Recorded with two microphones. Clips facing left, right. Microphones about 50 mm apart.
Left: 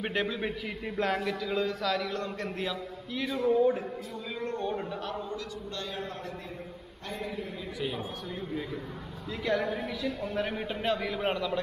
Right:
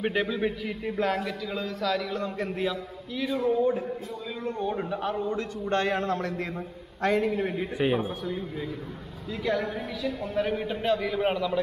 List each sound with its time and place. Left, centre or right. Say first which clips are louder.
0.0 s a man's voice: right 4 dB; centre
4.5 s a man's voice: right 4 dB; centre
4.9 s a man's voice: right 7 dB; right
5.7 s a man's voice: right 14 dB; right
9.4 s a man's voice: right 1 dB; centre